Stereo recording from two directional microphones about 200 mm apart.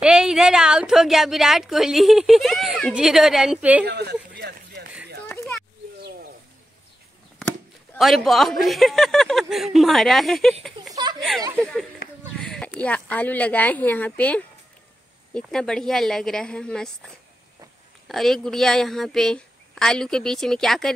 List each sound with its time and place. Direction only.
0.0 s a woman's voice: 5° right (ahead or behind)
3.8 s a sound: 55° right (ahead or behind)
7.9 s a woman's voice: centre (ahead or behind)